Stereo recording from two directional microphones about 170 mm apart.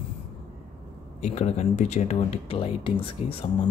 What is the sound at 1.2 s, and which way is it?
Speech, 40° left (ahead or behind).